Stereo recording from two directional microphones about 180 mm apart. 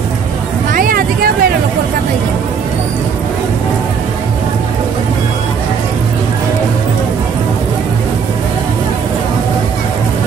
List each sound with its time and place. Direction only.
0.7 s vehicle: 55° right (ahead or behind)